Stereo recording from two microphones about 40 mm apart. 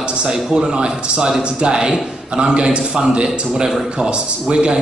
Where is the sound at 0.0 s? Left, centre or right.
Right.